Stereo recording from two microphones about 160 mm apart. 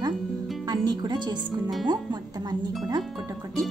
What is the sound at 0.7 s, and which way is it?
Music, 25° right (ahead or behind).